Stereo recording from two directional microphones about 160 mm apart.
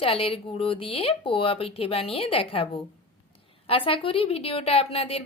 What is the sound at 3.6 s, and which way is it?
Speech, 35° left (ahead or behind).